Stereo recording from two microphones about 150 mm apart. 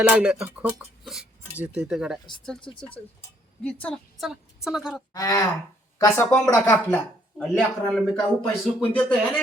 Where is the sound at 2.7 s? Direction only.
10° left (ahead or behind).